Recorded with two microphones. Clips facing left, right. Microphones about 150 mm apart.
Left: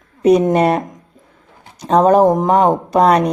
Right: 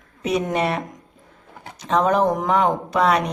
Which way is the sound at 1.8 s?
35° left (ahead or behind).